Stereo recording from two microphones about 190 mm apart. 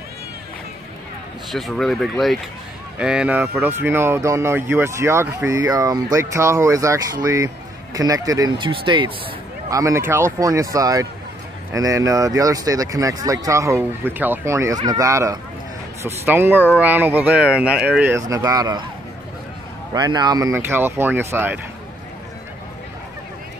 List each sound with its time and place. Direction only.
1.5 s speech: centre (ahead or behind); by 18.9 s 20° right (ahead or behind)
19.9 s speech: 20° right (ahead or behind)